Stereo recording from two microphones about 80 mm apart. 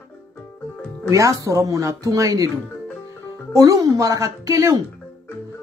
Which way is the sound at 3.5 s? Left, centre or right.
Right.